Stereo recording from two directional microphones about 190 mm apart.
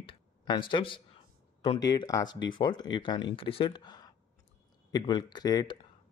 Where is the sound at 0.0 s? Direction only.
25° left (ahead or behind).